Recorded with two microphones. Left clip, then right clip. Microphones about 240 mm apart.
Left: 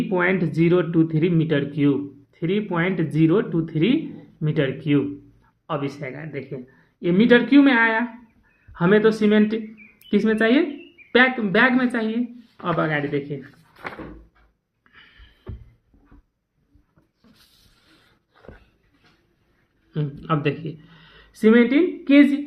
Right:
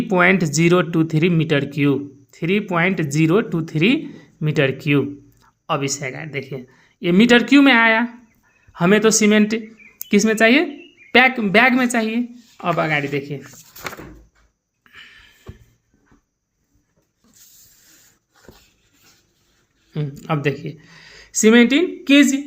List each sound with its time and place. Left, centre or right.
0.1 s speech: right
14.8 s a sound: right
19.9 s speech: right